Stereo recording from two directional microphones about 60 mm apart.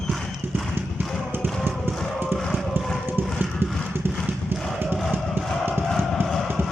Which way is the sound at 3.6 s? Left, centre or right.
Right.